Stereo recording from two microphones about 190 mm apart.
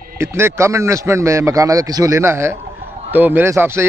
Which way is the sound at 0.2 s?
15° right (ahead or behind).